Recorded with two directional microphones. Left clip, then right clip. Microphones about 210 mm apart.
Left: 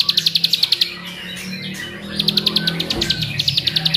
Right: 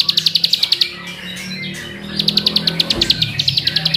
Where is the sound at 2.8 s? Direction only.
25° right (ahead or behind).